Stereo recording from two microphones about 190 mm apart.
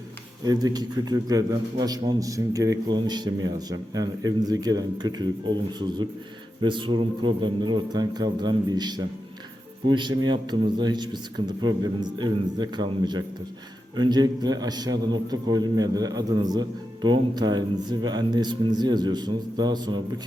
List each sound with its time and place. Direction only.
0.4 s a man's voice: 20° right (ahead or behind)
6.6 s a man's voice: 25° right (ahead or behind)